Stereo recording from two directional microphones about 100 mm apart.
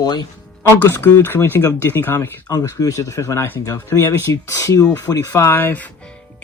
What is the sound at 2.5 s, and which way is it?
Speech, 35° left (ahead or behind).